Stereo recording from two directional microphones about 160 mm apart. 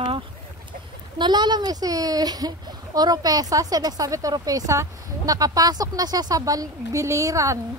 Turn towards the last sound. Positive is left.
turn(degrees=-20)  # may be behind; listen again after turning